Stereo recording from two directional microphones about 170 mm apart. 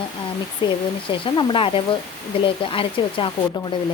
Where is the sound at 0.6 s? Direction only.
25° left (ahead or behind).